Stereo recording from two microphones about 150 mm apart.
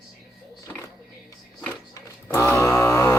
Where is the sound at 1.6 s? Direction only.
15° left (ahead or behind).